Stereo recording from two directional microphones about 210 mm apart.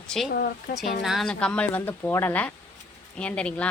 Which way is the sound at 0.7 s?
40° left (ahead or behind).